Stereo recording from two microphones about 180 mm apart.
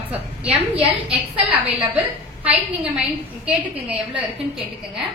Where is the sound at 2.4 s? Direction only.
5° right (ahead or behind).